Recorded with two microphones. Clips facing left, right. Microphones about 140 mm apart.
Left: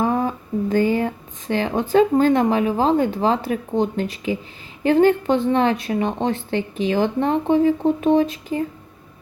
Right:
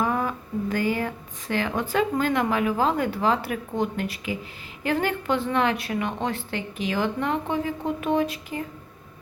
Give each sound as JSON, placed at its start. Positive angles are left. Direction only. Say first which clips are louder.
{"t": 0.0, "sound": "a woman's voice", "louder": "left 5 dB", "side_deg": 30}